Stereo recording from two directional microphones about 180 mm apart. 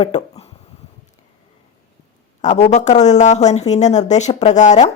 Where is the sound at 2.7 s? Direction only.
40° left (ahead or behind).